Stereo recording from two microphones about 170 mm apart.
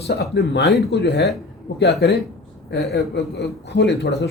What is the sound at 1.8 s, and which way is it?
Speech, 70° left (ahead or behind).